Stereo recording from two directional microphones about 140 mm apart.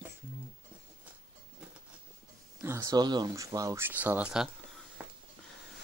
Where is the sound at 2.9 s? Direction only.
30° right (ahead or behind); by 4.5 s 5° right (ahead or behind).